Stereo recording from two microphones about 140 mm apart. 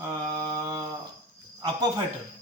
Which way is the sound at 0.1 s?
30° right (ahead or behind).